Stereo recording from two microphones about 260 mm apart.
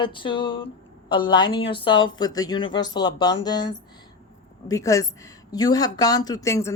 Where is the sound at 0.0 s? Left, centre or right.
Centre.